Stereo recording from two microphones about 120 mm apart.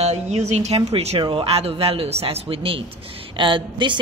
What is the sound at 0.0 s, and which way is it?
A man's voice, 65° right (ahead or behind).